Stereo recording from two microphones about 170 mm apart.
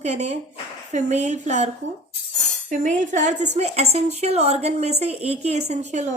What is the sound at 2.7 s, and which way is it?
A woman's voice, 50° right (ahead or behind).